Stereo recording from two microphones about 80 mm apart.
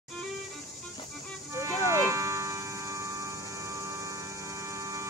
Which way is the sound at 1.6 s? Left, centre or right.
Right.